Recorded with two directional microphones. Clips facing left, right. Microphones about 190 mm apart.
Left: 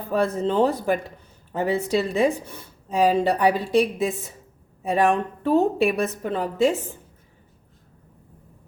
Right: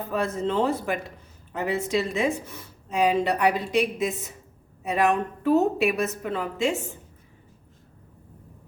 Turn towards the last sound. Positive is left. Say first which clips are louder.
# left 5 dB
turn(degrees=35)  # may be behind; listen again after turning